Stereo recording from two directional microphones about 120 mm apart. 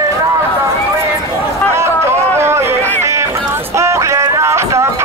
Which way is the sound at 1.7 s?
20° right (ahead or behind).